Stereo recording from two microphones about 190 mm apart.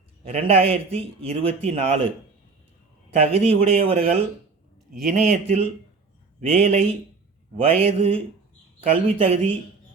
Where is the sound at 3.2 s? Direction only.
30° right (ahead or behind).